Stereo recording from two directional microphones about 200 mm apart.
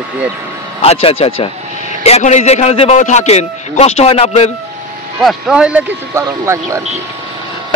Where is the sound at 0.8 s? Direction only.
30° left (ahead or behind).